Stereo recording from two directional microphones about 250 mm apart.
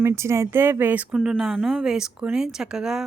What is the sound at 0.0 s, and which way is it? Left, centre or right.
Speech, centre.